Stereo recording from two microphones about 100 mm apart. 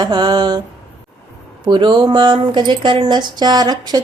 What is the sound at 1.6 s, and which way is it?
A woman's voice, 50° right (ahead or behind).